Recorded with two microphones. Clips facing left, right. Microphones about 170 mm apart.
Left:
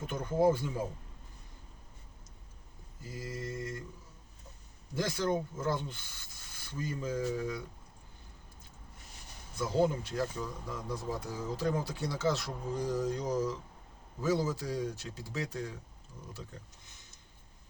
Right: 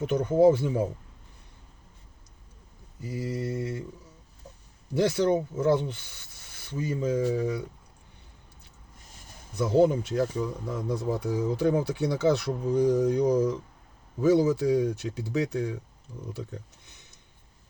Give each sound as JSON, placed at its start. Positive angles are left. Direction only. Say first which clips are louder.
{"t": 0.0, "sound": "speech", "louder": "right 8 dB", "side_deg": -70}
{"t": 3.0, "sound": "speech", "louder": "right 9 dB", "side_deg": -70}
{"t": 4.9, "sound": "speech", "louder": "right 8 dB", "side_deg": -70}
{"t": 9.6, "sound": "speech", "louder": "right 8 dB", "side_deg": -70}